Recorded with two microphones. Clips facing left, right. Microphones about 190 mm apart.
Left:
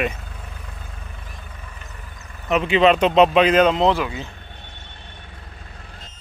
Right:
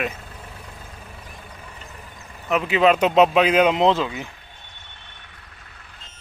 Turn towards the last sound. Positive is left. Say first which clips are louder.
# even
turn(degrees=-20)  # may be behind; listen again after turning